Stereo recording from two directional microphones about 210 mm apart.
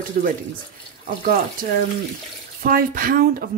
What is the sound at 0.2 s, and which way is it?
Speech, 45° right (ahead or behind).